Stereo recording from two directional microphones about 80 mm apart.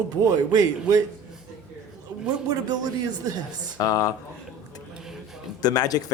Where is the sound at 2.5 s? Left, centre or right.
Right.